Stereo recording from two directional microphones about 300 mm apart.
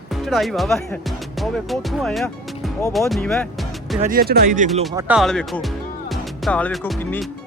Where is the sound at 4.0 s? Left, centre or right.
Right.